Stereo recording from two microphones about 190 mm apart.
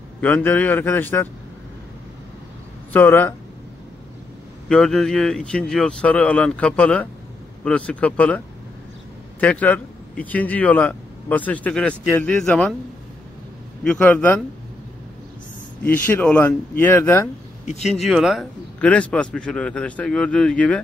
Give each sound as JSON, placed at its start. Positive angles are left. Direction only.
{"t": 0.2, "sound": "speech", "side_deg": 10}
{"t": 2.9, "sound": "speech", "side_deg": 10}
{"t": 4.6, "sound": "a man's voice", "side_deg": 0}
{"t": 9.4, "sound": "a man's voice", "side_deg": 5}
{"t": 13.8, "sound": "speech", "side_deg": 10}
{"t": 15.8, "sound": "speech", "side_deg": 10}
{"t": 17.6, "sound": "speech", "side_deg": 35}
{"t": 18.0, "sound": "a man's voice", "side_deg": 0}